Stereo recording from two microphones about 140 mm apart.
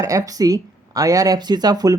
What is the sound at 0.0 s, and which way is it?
Speech, 25° right (ahead or behind).